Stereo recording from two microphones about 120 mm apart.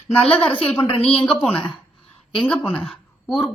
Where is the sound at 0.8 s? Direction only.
45° left (ahead or behind).